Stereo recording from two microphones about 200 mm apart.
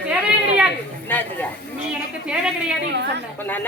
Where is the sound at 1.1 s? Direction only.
10° left (ahead or behind).